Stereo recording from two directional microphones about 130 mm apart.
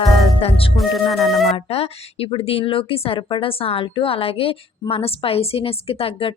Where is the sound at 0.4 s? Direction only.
45° left (ahead or behind).